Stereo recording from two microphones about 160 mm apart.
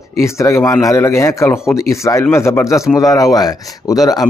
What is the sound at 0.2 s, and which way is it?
Speech, 15° left (ahead or behind).